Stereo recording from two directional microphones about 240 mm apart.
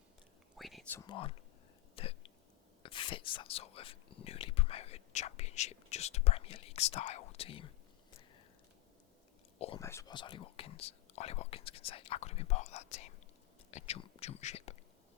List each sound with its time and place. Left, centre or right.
0.5 s whispering: centre
1.0 s speech: left
2.0 s a sound: left
2.8 s speech: left
9.6 s whispering: left
9.8 s speech: centre